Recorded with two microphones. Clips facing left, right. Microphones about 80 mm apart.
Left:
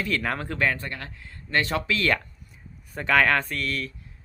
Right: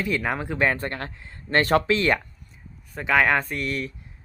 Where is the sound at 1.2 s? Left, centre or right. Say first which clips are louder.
Right 3 dB; right.